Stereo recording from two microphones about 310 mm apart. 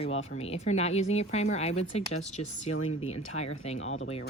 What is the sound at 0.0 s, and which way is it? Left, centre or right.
Speech, centre.